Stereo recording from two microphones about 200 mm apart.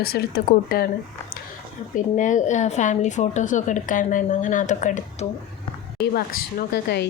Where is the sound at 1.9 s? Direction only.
40° left (ahead or behind).